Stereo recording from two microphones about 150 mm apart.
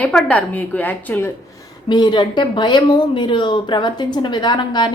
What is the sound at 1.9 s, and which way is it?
Speech, 30° left (ahead or behind).